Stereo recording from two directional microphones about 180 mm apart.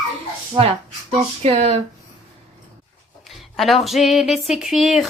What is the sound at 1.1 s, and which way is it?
Speech, 30° right (ahead or behind).